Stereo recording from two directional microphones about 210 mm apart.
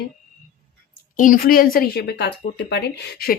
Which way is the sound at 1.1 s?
40° left (ahead or behind).